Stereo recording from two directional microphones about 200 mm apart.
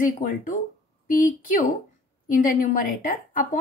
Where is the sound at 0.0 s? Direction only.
40° left (ahead or behind).